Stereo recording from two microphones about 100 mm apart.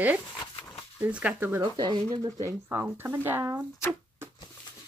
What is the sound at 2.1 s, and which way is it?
Speech, 40° right (ahead or behind).